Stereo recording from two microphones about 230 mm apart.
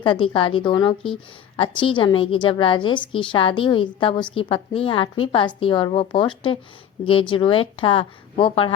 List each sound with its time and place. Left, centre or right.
0.0 s a woman's voice: left